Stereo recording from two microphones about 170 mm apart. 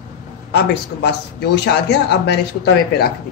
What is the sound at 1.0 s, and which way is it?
Speech, 80° left.